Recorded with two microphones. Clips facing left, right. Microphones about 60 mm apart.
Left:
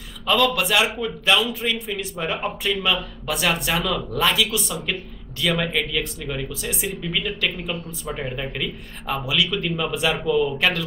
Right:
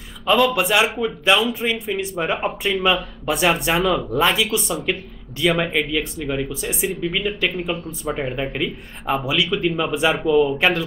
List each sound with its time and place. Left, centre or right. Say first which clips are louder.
0.3 s speech: right 3 dB; centre
10.2 s speech: right 4 dB; centre